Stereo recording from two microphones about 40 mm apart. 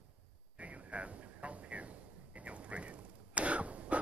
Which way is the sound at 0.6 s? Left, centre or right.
Right.